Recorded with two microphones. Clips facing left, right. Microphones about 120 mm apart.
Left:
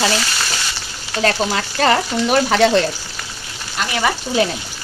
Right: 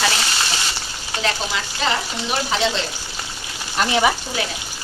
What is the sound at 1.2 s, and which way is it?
Speech, 55° left (ahead or behind).